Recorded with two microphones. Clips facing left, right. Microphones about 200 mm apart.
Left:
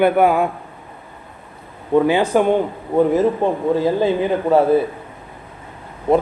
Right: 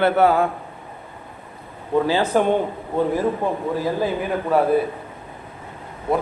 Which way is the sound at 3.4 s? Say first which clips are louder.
Left 5 dB; 20° left (ahead or behind).